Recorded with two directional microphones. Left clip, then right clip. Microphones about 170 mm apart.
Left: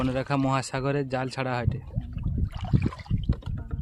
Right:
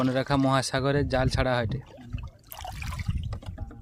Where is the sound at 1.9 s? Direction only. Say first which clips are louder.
Left 5 dB; 70° right (ahead or behind).